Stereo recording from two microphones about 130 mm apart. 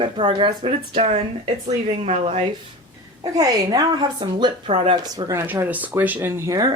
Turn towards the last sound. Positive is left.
turn(degrees=-25)  # may be behind; listen again after turning